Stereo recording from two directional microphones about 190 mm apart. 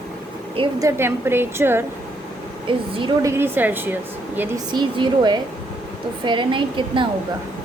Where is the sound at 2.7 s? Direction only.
25° right (ahead or behind).